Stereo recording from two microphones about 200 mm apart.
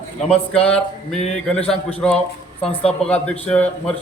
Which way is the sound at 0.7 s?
5° left (ahead or behind).